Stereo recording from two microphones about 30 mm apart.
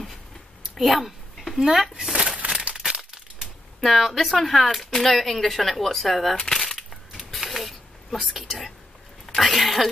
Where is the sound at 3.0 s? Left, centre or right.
Centre.